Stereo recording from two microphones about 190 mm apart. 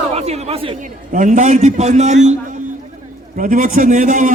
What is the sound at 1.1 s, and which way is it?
A man's voice, 40° right (ahead or behind).